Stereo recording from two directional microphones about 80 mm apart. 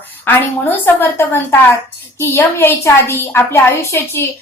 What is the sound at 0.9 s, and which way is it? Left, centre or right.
A woman's voice, left.